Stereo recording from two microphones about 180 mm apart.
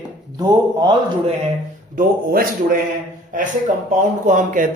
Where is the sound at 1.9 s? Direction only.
55° right (ahead or behind).